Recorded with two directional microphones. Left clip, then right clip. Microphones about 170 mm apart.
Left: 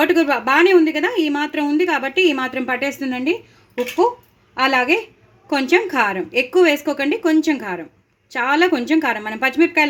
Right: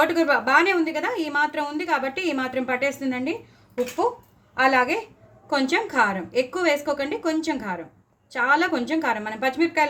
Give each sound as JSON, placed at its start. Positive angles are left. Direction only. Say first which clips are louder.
{"t": 0.0, "sound": "a woman's voice", "louder": "left 4 dB", "side_deg": 55}
{"t": 4.5, "sound": "a woman's voice", "louder": "left 3 dB", "side_deg": 55}